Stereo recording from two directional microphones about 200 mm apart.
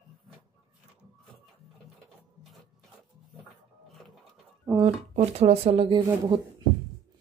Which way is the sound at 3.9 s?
Centre (ahead or behind).